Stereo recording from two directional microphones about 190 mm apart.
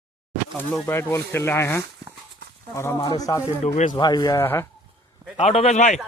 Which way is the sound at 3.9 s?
20° left (ahead or behind).